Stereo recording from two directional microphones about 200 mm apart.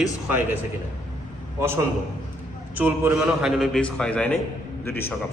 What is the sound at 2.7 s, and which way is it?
A man's voice, 10° right (ahead or behind).